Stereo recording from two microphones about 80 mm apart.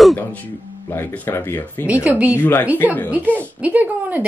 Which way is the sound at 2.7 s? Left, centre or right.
Left.